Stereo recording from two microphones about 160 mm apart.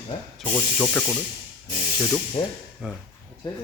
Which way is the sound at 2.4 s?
35° left (ahead or behind).